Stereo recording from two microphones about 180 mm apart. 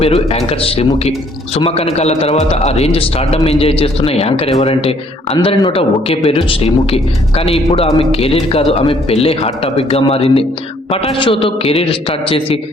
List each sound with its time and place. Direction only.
0.0 s speech: 35° left (ahead or behind)